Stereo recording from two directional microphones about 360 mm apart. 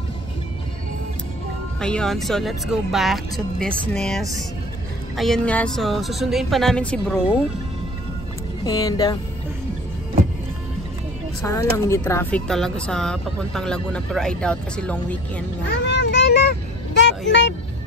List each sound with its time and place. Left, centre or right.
1.8 s speech: centre
8.6 s speech: centre
11.7 s speech: centre
15.8 s vehicle: left
17.3 s speech: left